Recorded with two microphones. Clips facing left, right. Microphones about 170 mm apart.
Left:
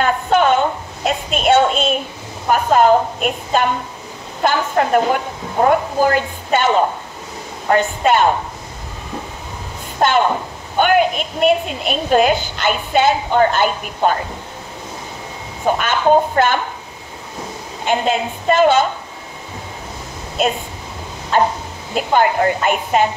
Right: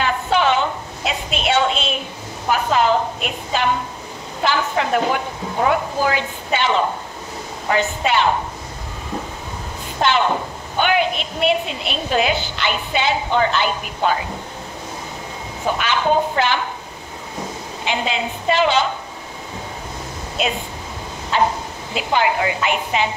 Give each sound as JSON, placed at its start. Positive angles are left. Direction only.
{"t": 0.0, "sound": "a sound", "side_deg": 50}
{"t": 2.5, "sound": "a woman's voice", "side_deg": 45}
{"t": 7.7, "sound": "a woman's voice", "side_deg": 50}
{"t": 10.0, "sound": "a woman's voice", "side_deg": 50}
{"t": 15.8, "sound": "a woman's voice", "side_deg": 50}
{"t": 17.8, "sound": "a woman's voice", "side_deg": 50}
{"t": 20.4, "sound": "a woman's voice", "side_deg": 45}